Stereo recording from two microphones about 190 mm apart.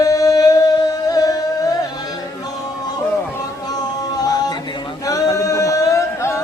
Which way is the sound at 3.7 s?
20° left (ahead or behind).